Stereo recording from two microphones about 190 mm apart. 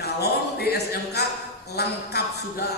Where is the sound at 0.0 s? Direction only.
55° left (ahead or behind).